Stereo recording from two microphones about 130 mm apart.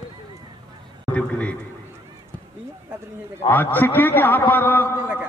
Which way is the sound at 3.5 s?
15° left (ahead or behind).